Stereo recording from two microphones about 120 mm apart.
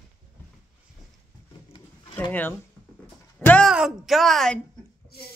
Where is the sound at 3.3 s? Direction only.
10° left (ahead or behind).